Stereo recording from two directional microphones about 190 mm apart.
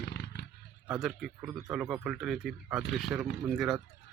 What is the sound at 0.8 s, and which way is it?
Speech, centre (ahead or behind).